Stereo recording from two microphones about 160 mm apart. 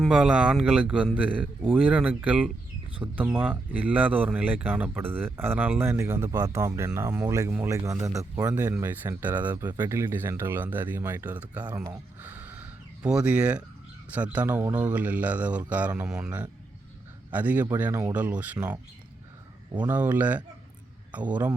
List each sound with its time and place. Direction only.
0.0 s speech: 5° right (ahead or behind)
11.6 s speech: 20° right (ahead or behind)
11.9 s a sound: 10° right (ahead or behind)
14.1 s speech: 10° right (ahead or behind)
19.8 s a man's voice: 10° right (ahead or behind)